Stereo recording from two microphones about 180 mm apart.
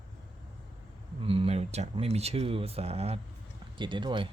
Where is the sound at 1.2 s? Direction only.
30° right (ahead or behind).